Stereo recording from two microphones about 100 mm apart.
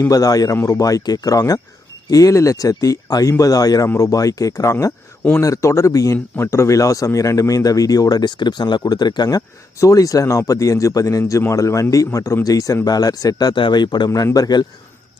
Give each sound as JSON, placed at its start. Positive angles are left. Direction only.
{"t": 0.1, "sound": "speech", "side_deg": 35}
{"t": 13.6, "sound": "speech", "side_deg": 50}